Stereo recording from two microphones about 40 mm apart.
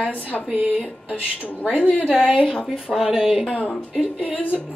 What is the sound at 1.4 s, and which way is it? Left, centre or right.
Speech, left.